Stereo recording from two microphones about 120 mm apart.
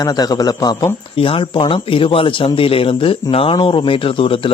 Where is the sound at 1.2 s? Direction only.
50° left (ahead or behind).